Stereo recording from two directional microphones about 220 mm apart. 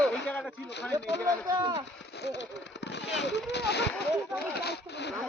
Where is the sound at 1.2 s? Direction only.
5° left (ahead or behind).